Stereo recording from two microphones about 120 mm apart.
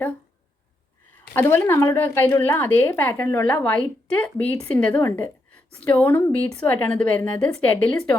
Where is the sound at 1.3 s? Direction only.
20° left (ahead or behind).